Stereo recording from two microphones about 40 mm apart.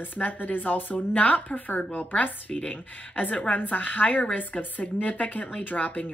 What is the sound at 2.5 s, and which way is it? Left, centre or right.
A woman's voice, left.